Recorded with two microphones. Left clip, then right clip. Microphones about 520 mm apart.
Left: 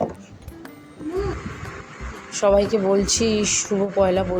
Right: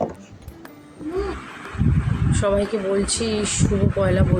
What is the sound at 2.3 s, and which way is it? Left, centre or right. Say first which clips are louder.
Speech: left 4 dB; right.